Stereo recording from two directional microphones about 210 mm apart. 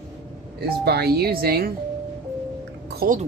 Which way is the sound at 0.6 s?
50° right (ahead or behind).